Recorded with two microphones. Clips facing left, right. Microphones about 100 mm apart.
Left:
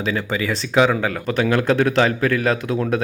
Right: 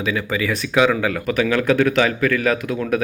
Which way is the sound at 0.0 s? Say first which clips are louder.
Even; 30° left (ahead or behind).